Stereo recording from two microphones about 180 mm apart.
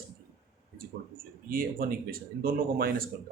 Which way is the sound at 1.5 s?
55° right (ahead or behind).